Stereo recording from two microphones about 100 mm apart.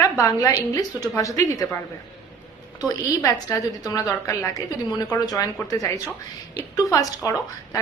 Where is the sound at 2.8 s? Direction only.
35° left (ahead or behind).